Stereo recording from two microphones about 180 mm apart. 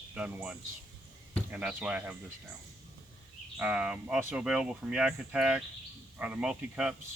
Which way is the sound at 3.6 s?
5° right (ahead or behind).